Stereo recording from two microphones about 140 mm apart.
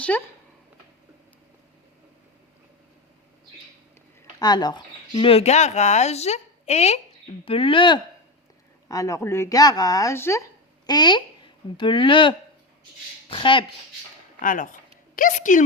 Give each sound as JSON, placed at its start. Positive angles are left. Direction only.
{"t": 4.4, "sound": "speech", "side_deg": 30}
{"t": 7.4, "sound": "speech", "side_deg": 40}
{"t": 8.9, "sound": "speech", "side_deg": 25}
{"t": 10.8, "sound": "speech", "side_deg": 30}
{"t": 14.4, "sound": "speech", "side_deg": 70}